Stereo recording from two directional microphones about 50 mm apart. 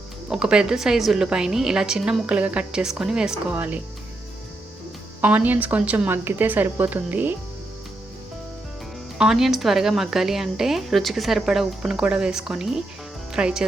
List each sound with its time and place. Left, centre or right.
0.3 s a woman's voice: centre
2.2 s a woman's voice: right
2.7 s a woman's voice: centre
3.5 s speech: right
5.2 s speech: right
6.1 s speech: right
9.1 s a woman's voice: centre